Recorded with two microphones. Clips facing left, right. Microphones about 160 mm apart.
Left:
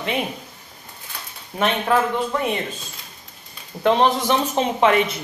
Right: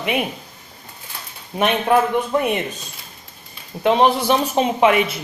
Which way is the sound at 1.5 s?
20° right (ahead or behind).